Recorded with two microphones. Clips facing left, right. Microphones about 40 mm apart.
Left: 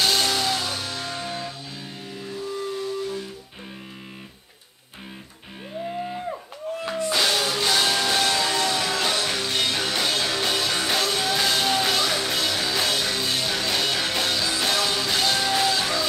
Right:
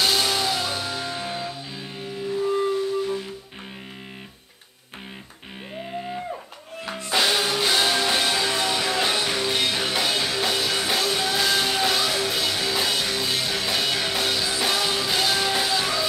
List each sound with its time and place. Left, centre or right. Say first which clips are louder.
0.0 s music: even; centre
2.4 s music: right 6 dB; right
7.1 s music: right 2 dB; centre